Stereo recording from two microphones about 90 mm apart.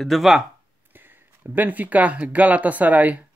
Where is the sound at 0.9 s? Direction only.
25° right (ahead or behind).